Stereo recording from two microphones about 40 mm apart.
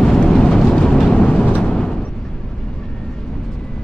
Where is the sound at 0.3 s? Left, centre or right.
Centre.